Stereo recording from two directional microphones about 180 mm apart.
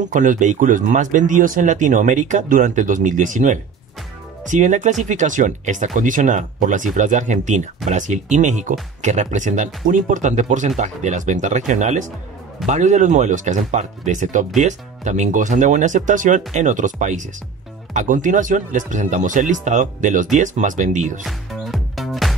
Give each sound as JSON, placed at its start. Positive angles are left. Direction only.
{"t": 0.0, "sound": "speech", "side_deg": -45}
{"t": 21.2, "sound": "music", "side_deg": 0}